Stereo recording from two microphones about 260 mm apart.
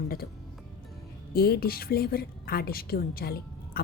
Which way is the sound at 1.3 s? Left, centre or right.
Left.